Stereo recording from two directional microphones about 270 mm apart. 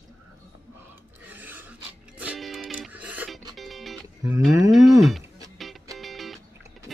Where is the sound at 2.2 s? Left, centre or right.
Centre.